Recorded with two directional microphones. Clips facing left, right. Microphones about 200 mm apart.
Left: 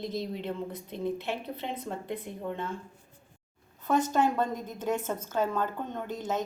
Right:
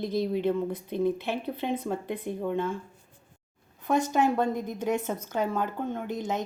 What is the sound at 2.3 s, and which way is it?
Speech, 20° right (ahead or behind).